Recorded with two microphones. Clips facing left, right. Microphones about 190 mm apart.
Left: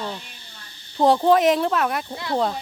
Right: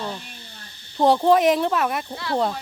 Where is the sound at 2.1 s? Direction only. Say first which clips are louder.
Even; 15° left (ahead or behind).